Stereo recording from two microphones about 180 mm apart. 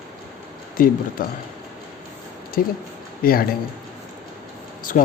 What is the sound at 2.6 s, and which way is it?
Speech, 50° left (ahead or behind).